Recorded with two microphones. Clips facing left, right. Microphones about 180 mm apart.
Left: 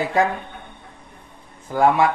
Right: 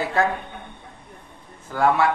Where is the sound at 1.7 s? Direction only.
15° left (ahead or behind).